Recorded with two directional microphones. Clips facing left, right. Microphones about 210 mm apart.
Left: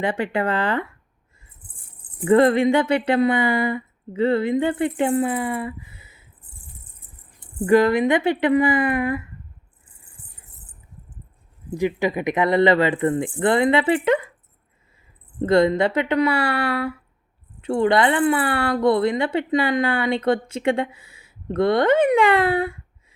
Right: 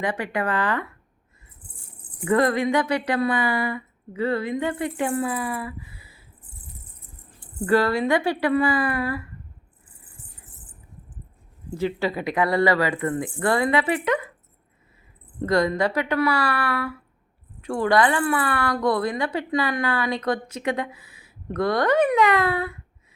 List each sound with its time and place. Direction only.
0.0 s a woman's voice: 25° left (ahead or behind)
2.2 s a woman's voice: 25° left (ahead or behind)
7.3 s a woman's voice: 20° left (ahead or behind)
11.7 s a woman's voice: 15° left (ahead or behind)
15.4 s a woman's voice: 25° left (ahead or behind)